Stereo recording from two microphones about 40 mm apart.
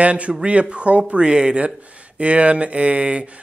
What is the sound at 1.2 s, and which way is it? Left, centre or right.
Speech, right.